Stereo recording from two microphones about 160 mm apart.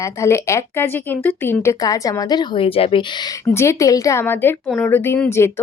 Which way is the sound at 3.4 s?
15° left (ahead or behind).